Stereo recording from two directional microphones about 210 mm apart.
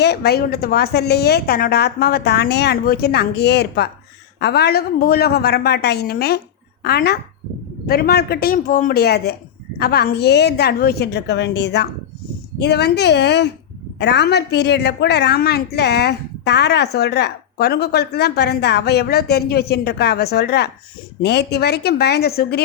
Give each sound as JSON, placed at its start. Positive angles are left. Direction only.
{"t": 0.0, "sound": "a woman's voice", "side_deg": 50}